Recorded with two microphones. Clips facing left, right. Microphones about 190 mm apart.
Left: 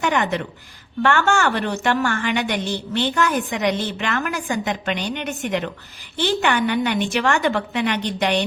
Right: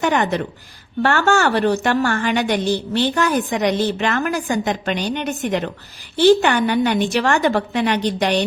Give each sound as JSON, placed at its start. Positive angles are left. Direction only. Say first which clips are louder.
{"t": 0.0, "sound": "a woman's voice", "louder": "right 3 dB", "side_deg": -35}